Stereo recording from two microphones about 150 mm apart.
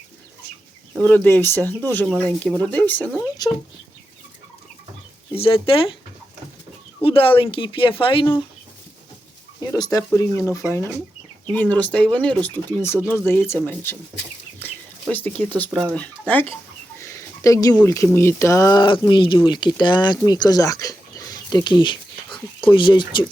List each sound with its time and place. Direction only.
0.9 s speech: centre (ahead or behind)
1.2 s speech: 15° left (ahead or behind)
5.4 s speech: 40° left (ahead or behind)
7.0 s speech: 40° left (ahead or behind)
9.6 s speech: 25° left (ahead or behind); by 12.5 s 5° left (ahead or behind)
13.0 s speech: 10° right (ahead or behind)
13.6 s speech: 15° left (ahead or behind)
14.6 s bird: 10° left (ahead or behind)
15.7 s speech: 5° left (ahead or behind)
17.0 s a sound: 20° left (ahead or behind)
17.8 s speech: 15° left (ahead or behind); by 23.2 s 30° left (ahead or behind)